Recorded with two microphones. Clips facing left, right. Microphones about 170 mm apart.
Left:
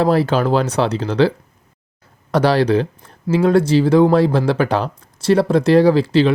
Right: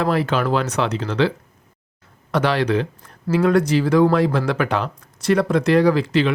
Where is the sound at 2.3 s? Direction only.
35° left (ahead or behind).